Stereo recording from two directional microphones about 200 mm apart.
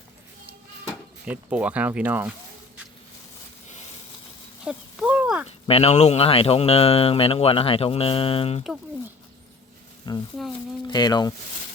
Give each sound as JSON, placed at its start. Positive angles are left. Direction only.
{"t": 1.3, "sound": "speech", "side_deg": -5}
{"t": 4.6, "sound": "a sound", "side_deg": -5}
{"t": 5.6, "sound": "speech", "side_deg": 30}
{"t": 10.1, "sound": "speech", "side_deg": 20}